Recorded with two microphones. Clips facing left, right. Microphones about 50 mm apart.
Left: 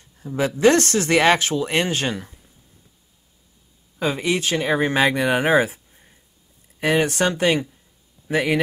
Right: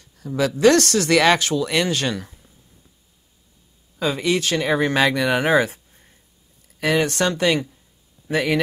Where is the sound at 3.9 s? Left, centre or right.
Left.